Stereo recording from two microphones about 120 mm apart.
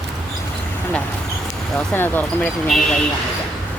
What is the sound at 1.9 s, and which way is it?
Speech, 15° left (ahead or behind).